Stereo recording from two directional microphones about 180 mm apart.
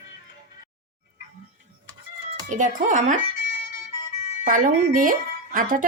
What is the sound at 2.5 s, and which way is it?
Speech, 45° right (ahead or behind).